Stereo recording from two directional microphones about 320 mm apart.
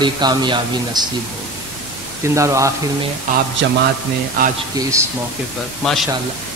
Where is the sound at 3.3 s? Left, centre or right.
Right.